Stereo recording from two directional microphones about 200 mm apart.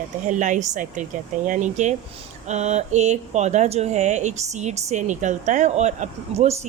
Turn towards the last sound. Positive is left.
turn(degrees=-35)  # may be behind; listen again after turning